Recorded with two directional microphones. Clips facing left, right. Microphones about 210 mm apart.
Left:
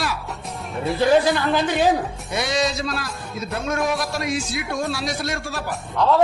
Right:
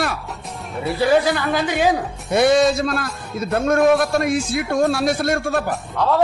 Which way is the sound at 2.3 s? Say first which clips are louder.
Right 9 dB; 55° right (ahead or behind).